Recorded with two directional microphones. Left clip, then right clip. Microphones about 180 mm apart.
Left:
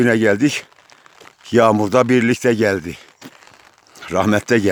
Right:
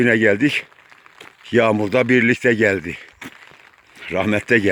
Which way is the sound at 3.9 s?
25° left (ahead or behind).